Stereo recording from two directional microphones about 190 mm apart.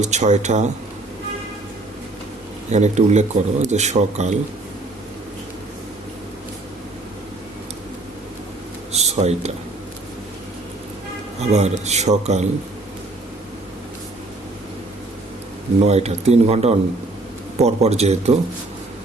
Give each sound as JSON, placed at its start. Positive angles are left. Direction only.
{"t": 0.0, "sound": "speech", "side_deg": -35}
{"t": 2.7, "sound": "speech", "side_deg": -35}
{"t": 8.9, "sound": "a sound", "side_deg": -35}
{"t": 11.3, "sound": "speech", "side_deg": -35}
{"t": 15.8, "sound": "speech", "side_deg": -35}